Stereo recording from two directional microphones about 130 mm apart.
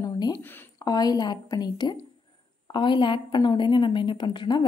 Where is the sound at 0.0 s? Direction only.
30° left (ahead or behind).